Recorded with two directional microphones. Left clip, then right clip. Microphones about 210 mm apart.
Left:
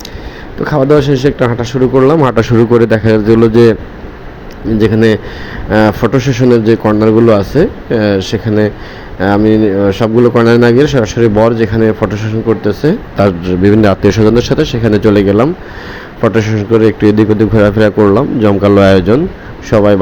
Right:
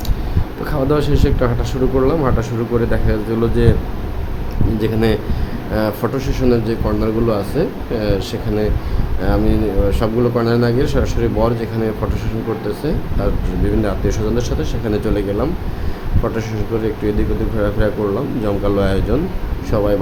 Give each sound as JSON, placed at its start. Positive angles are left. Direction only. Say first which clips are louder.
{"t": 0.6, "sound": "speech", "louder": "left 9 dB", "side_deg": 25}
{"t": 4.8, "sound": "speech", "louder": "left 9 dB", "side_deg": 30}